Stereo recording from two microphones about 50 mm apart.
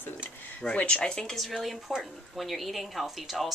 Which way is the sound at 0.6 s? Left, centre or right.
Left.